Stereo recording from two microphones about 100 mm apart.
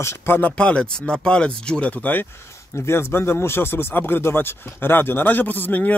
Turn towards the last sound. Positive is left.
turn(degrees=15)  # may be behind; listen again after turning